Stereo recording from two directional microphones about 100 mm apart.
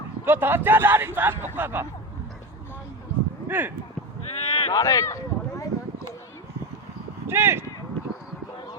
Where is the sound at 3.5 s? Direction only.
20° right (ahead or behind).